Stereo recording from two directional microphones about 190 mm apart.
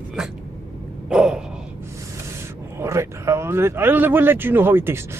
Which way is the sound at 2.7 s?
15° right (ahead or behind).